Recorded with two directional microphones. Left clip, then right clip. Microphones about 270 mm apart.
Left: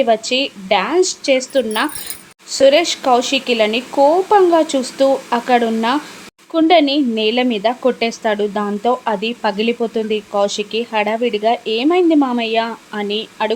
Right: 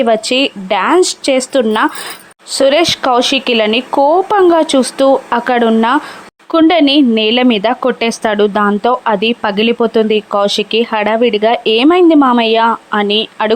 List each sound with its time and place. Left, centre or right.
0.0 s speech: centre